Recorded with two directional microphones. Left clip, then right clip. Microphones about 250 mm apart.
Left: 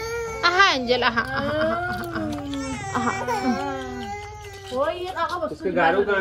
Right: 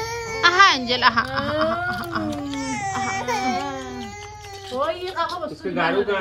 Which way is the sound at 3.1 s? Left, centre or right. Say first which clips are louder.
Right 1 dB; right.